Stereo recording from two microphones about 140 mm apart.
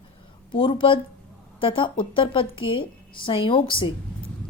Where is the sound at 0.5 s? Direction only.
40° left (ahead or behind).